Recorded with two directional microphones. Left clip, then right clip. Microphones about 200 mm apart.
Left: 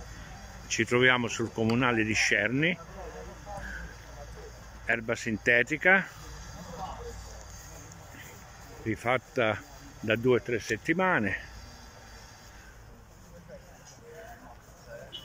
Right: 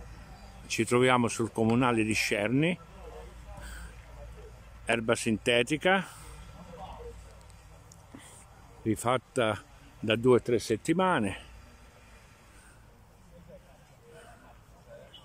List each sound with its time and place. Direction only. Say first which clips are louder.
0.7 s speech: left 1 dB; 15° right (ahead or behind)
4.8 s speech: right 2 dB; 10° right (ahead or behind)
8.8 s speech: even; 20° right (ahead or behind)